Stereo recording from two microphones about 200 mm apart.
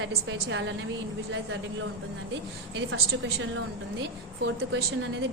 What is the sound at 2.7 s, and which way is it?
Speech, 85° right.